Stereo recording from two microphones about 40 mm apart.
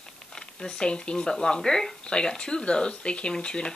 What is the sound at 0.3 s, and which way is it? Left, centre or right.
Speech, centre.